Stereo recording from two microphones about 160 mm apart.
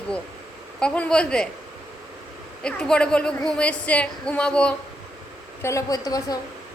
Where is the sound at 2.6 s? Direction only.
5° left (ahead or behind).